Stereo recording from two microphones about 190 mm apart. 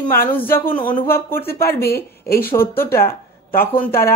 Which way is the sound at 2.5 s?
10° left (ahead or behind).